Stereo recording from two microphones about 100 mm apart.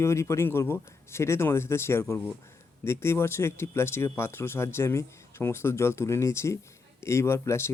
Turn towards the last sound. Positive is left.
turn(degrees=25)  # may be behind; listen again after turning